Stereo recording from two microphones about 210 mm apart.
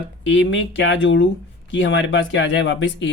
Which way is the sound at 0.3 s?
60° left (ahead or behind).